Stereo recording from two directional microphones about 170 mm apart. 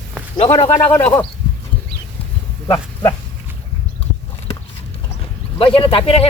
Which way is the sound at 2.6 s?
25° left (ahead or behind).